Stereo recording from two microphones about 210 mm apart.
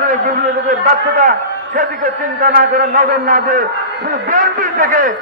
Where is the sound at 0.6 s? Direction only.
40° right (ahead or behind).